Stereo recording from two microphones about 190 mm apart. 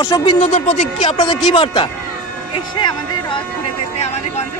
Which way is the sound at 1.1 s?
20° left (ahead or behind).